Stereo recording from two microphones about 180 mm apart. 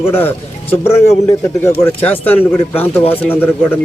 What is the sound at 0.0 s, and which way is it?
Speech, 15° left (ahead or behind).